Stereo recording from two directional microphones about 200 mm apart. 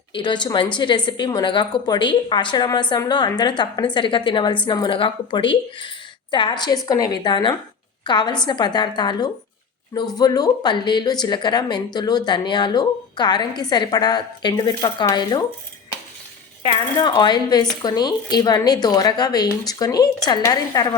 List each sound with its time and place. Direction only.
0.2 s a woman's voice: 20° left (ahead or behind)
17.0 s a woman's voice: 20° left (ahead or behind)